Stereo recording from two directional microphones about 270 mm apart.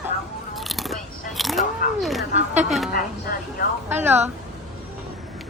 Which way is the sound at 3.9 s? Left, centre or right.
Centre.